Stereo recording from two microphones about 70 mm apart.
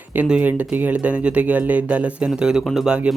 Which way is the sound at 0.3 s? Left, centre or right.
Centre.